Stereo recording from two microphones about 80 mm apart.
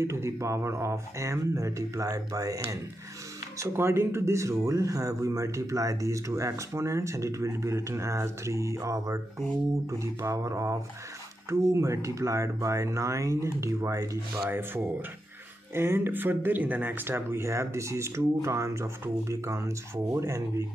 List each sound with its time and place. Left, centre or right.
0.0 s speech: right
3.5 s speech: right
14.5 s speech: right